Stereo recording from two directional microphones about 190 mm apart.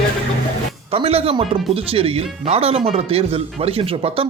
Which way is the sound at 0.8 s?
30° right (ahead or behind).